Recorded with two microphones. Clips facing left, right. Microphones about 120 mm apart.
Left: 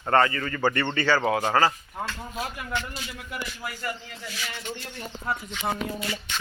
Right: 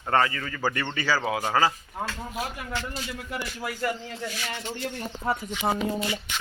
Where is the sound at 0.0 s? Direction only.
5° right (ahead or behind).